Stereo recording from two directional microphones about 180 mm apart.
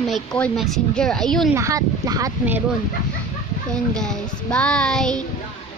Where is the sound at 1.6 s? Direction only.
20° right (ahead or behind).